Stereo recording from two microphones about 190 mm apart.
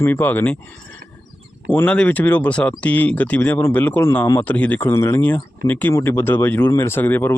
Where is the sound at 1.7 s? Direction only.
5° left (ahead or behind).